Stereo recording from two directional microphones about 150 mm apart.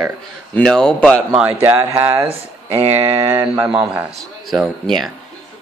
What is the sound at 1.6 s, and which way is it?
Speech, 20° right (ahead or behind).